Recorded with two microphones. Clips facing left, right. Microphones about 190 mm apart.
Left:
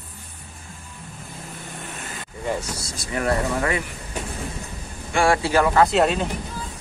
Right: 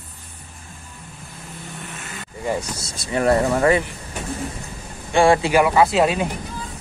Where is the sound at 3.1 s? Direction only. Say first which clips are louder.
Right 5 dB; 30° right (ahead or behind).